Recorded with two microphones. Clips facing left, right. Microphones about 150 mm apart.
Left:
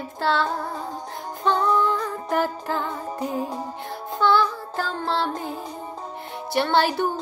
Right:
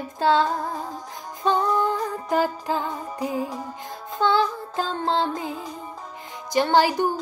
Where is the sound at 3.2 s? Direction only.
10° right (ahead or behind).